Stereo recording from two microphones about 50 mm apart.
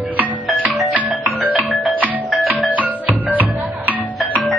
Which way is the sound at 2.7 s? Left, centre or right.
Right.